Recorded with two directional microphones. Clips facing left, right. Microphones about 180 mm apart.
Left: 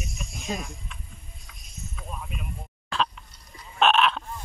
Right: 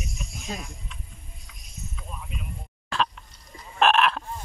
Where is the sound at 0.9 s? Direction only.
55° left (ahead or behind).